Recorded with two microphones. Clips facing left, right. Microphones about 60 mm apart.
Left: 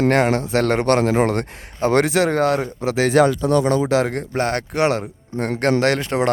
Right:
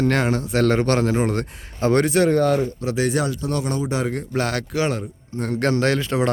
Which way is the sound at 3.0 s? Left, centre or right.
Left.